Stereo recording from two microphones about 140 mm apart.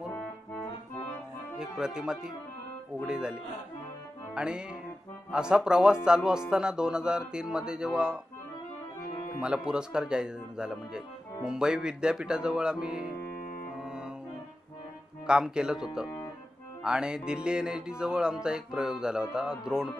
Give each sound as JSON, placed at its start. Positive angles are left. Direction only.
{"t": 1.6, "sound": "music", "side_deg": -5}
{"t": 9.4, "sound": "music", "side_deg": -5}
{"t": 13.4, "sound": "music", "side_deg": 80}
{"t": 13.7, "sound": "music", "side_deg": -5}
{"t": 15.2, "sound": "music", "side_deg": -5}